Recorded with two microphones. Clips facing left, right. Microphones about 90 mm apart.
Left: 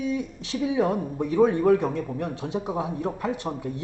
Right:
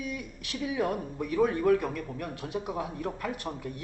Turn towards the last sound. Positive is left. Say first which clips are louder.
# left 6 dB
turn(degrees=20)  # may be behind; listen again after turning